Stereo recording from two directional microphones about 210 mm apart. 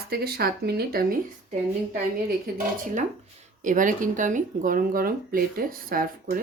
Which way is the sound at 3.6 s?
40° right (ahead or behind).